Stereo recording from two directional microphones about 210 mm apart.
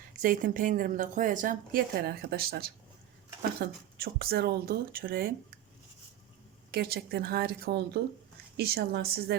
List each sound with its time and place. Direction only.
0.2 s speech: 40° right (ahead or behind)
6.7 s speech: 45° right (ahead or behind)